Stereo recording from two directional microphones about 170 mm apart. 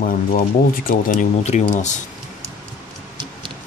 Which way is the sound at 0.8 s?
55° left (ahead or behind).